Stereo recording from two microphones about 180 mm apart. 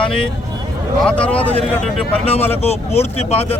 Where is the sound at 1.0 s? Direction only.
5° left (ahead or behind).